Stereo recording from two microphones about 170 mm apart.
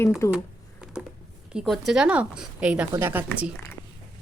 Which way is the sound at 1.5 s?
5° right (ahead or behind).